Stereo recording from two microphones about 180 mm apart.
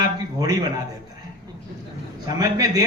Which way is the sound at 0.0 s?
20° right (ahead or behind).